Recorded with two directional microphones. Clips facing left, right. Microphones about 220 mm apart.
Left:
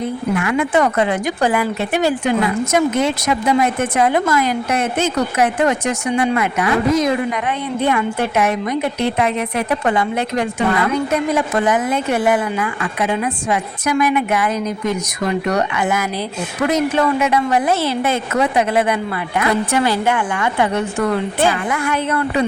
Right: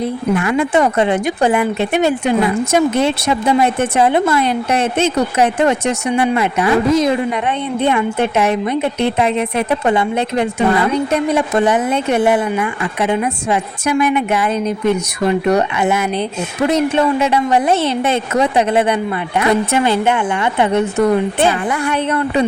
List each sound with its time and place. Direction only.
0.3 s speech: 30° right (ahead or behind)
21.7 s speech: 30° right (ahead or behind)